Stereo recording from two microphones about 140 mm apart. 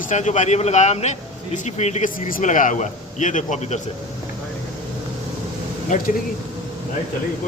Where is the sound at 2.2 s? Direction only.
75° left (ahead or behind); by 3.8 s 55° left (ahead or behind).